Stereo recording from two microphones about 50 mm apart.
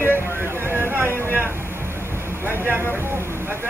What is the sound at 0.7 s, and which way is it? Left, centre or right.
Vehicle, right.